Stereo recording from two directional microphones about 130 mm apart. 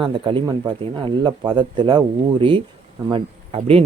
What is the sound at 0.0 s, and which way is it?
Speech, 40° right (ahead or behind).